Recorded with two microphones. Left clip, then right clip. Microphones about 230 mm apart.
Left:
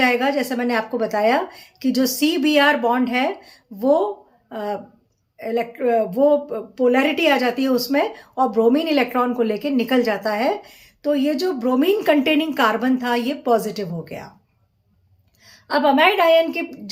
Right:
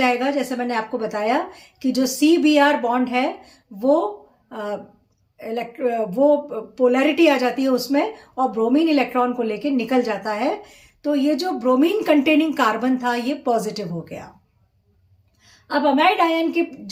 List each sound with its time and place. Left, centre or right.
0.0 s a woman's voice: centre
15.4 s a woman's voice: centre